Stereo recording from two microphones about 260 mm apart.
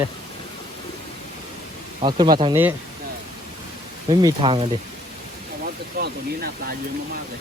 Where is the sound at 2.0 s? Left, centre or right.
Centre.